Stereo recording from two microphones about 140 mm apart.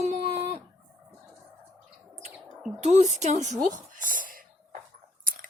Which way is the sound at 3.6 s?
70° right (ahead or behind).